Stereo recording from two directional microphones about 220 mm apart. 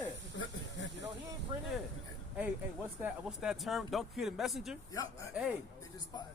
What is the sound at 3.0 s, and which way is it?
Speech, 5° right (ahead or behind).